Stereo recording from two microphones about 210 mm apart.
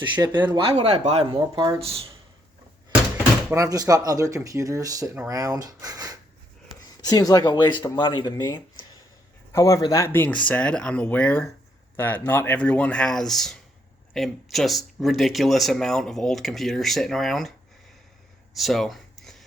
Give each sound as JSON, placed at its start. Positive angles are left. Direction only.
{"t": 0.2, "sound": "speech", "side_deg": -15}
{"t": 3.5, "sound": "speech", "side_deg": -15}
{"t": 7.0, "sound": "speech", "side_deg": 20}
{"t": 18.5, "sound": "a sound", "side_deg": 0}